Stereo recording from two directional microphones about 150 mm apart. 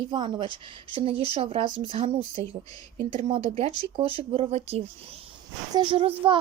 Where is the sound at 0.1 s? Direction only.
30° right (ahead or behind).